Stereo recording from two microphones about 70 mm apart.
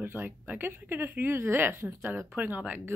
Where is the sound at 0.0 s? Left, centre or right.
Right.